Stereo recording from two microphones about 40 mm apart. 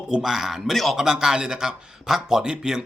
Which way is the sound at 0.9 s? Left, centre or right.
Centre.